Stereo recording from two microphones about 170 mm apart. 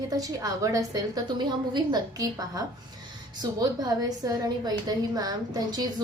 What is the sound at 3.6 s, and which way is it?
A woman's voice, 20° right (ahead or behind).